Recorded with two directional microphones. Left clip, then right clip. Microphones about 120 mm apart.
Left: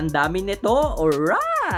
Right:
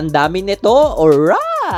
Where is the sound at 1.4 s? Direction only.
25° right (ahead or behind).